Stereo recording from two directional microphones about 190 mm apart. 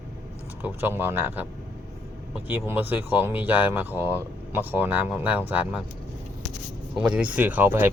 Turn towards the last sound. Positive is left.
turn(degrees=-10)  # may be behind; listen again after turning